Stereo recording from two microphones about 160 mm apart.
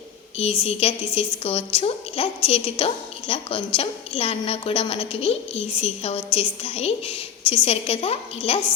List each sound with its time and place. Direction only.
0.6 s a woman's voice: 40° left (ahead or behind)